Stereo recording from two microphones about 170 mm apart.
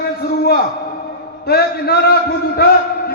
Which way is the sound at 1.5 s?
70° left (ahead or behind).